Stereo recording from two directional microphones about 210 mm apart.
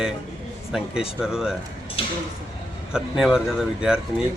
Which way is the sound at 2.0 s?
25° left (ahead or behind).